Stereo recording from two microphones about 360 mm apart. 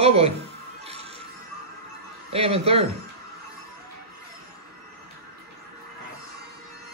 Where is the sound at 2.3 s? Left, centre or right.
Centre.